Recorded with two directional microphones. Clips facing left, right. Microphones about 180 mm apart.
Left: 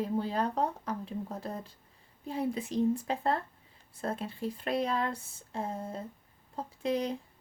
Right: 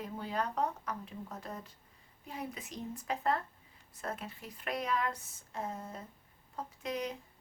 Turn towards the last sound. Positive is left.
turn(degrees=30)  # may be behind; listen again after turning